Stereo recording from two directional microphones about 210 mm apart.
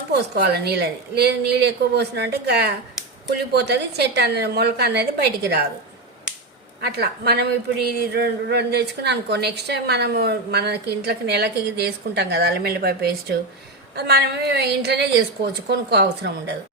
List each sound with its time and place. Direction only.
0.1 s speech: 50° right (ahead or behind)
6.8 s speech: 50° right (ahead or behind)